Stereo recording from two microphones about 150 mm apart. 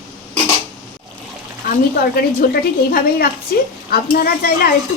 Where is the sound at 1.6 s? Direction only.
80° left.